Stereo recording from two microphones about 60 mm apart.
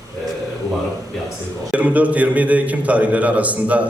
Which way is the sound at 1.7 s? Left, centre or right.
Right.